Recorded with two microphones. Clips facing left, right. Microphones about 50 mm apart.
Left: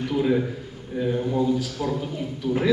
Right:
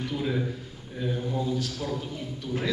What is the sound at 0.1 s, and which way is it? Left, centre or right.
A man's voice, centre.